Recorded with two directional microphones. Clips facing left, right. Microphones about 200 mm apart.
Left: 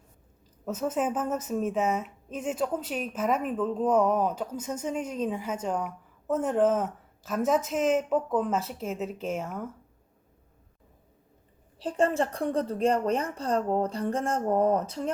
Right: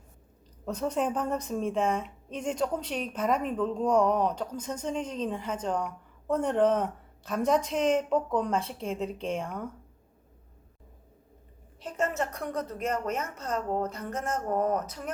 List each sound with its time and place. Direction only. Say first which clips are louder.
0.6 s a woman's voice: left 1 dB; 5° left (ahead or behind)
11.8 s a woman's voice: left 5 dB; 30° left (ahead or behind)